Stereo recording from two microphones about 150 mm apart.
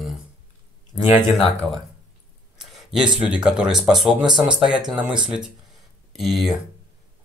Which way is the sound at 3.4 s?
5° right (ahead or behind).